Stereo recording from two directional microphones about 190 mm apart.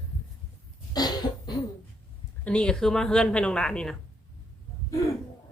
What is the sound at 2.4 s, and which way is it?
Speech, 5° left (ahead or behind).